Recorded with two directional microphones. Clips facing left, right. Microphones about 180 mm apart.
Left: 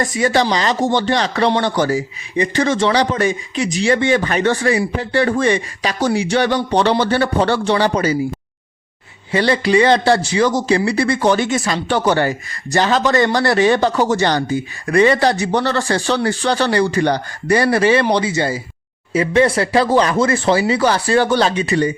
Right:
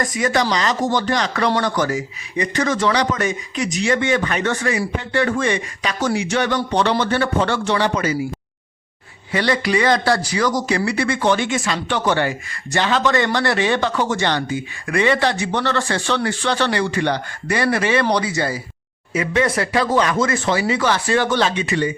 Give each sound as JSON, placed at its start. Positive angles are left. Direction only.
{"t": 0.0, "sound": "a man's voice", "side_deg": 30}
{"t": 9.3, "sound": "a man's voice", "side_deg": 30}
{"t": 18.0, "sound": "a man's voice", "side_deg": 25}